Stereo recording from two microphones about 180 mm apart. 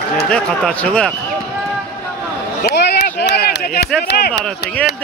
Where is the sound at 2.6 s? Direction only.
65° left (ahead or behind).